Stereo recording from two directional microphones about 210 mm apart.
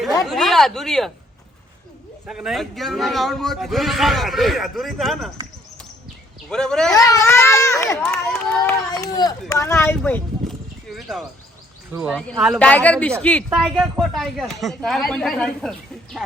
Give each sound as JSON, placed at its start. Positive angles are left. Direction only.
{"t": 0.3, "sound": "speech", "side_deg": 0}
{"t": 2.2, "sound": "speech", "side_deg": 0}
{"t": 6.5, "sound": "speech", "side_deg": 5}
{"t": 6.9, "sound": "speech", "side_deg": 15}
{"t": 8.0, "sound": "speech", "side_deg": 5}
{"t": 8.9, "sound": "speech", "side_deg": 20}
{"t": 12.4, "sound": "speech", "side_deg": 0}